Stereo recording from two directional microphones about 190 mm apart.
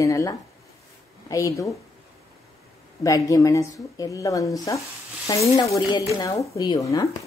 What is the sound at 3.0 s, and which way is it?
Speech, 20° left (ahead or behind).